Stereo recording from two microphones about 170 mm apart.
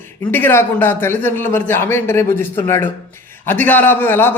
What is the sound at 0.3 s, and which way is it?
A man's voice, 15° left (ahead or behind).